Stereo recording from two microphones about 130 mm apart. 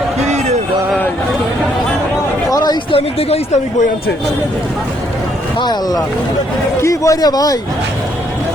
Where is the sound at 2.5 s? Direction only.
30° left (ahead or behind).